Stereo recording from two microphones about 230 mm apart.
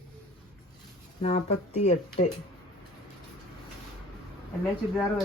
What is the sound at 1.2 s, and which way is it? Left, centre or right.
Speech, left.